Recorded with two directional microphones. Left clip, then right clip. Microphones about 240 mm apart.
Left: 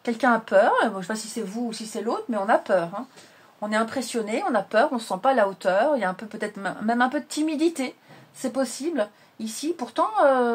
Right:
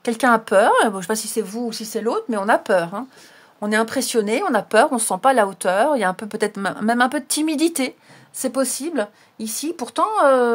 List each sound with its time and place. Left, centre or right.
0.0 s speech: right